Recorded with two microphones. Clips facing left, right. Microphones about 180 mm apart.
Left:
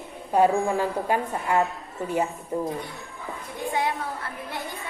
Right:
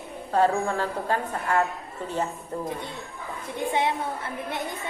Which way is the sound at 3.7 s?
25° right (ahead or behind).